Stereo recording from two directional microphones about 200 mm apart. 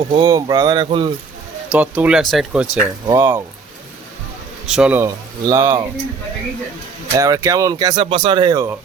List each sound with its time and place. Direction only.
0.1 s speech: 20° right (ahead or behind)
1.7 s speech: 5° right (ahead or behind)
4.7 s speech: 5° right (ahead or behind)
7.2 s speech: 15° right (ahead or behind)